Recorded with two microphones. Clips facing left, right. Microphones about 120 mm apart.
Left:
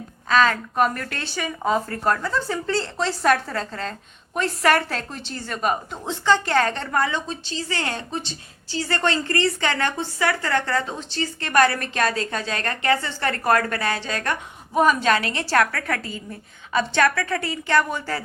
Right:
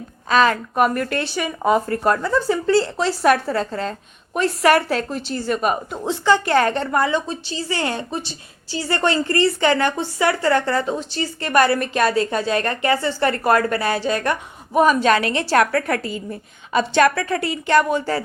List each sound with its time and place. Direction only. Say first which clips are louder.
0.3 s a woman's voice: right 2 dB; 15° right (ahead or behind)
17.9 s a woman's voice: right 7 dB; 25° right (ahead or behind)